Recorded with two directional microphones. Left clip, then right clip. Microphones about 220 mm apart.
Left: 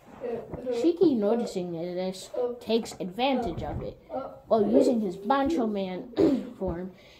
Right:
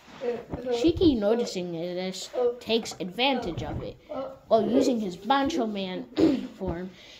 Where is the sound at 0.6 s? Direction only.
30° right (ahead or behind).